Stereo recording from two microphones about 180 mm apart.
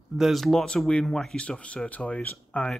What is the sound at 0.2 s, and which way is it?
Speech, centre (ahead or behind).